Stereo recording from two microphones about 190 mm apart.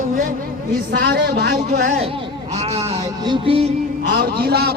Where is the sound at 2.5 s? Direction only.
35° right (ahead or behind).